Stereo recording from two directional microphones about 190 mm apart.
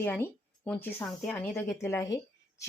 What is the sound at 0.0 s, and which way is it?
Speech, 10° left (ahead or behind).